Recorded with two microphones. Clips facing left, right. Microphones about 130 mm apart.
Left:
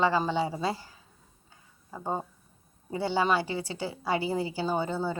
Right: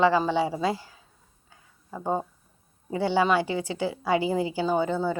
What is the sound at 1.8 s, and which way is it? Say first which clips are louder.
Speech: right 5 dB; 10° right (ahead or behind).